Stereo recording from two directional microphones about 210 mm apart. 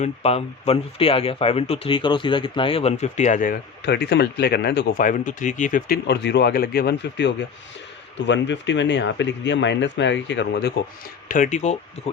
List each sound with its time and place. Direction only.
0.0 s speech: 30° left (ahead or behind); by 10.7 s 55° left (ahead or behind)
11.3 s speech: 35° left (ahead or behind)